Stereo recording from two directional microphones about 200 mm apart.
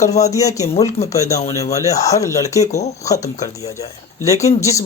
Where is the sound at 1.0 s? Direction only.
30° left (ahead or behind).